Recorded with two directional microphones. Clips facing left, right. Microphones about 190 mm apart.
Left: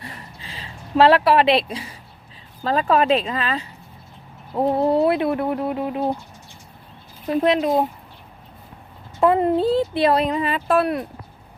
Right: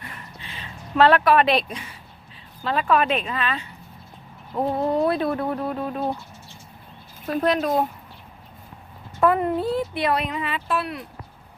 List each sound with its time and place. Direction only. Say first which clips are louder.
0.0 s a sound: left 2 dB; 30° left (ahead or behind)
2.6 s speech: left 3 dB; 35° left (ahead or behind); by 6.1 s 15° left (ahead or behind)
7.3 s speech: left 3 dB; 20° left (ahead or behind)
9.2 s speech: left 4 dB; 25° left (ahead or behind); by 11.0 s 50° left (ahead or behind)